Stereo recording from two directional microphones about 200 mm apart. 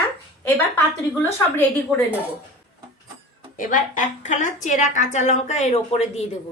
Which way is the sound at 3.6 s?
40° left (ahead or behind).